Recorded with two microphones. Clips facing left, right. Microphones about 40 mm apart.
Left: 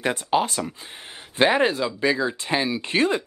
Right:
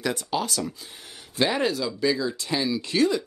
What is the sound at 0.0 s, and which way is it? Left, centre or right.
Speech, left.